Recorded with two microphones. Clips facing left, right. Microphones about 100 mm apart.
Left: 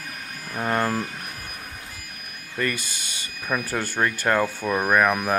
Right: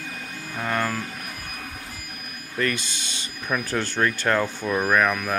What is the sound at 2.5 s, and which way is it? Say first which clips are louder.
Speech: right 1 dB; 5° left (ahead or behind).